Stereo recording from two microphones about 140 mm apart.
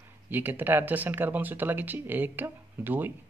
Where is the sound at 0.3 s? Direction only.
15° right (ahead or behind).